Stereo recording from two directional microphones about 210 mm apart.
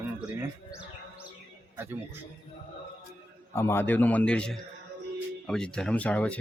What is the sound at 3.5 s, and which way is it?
A man's voice, 10° left (ahead or behind).